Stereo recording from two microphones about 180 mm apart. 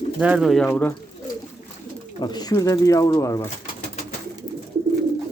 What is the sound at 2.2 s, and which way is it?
Speech, 20° left (ahead or behind).